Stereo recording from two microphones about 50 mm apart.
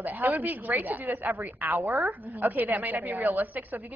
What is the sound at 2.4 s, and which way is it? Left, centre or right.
A woman's voice, right.